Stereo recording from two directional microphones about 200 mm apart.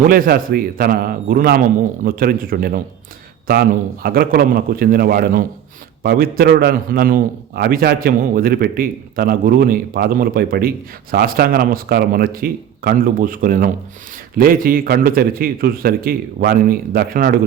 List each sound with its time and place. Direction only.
0.0 s a man's voice: 45° right (ahead or behind)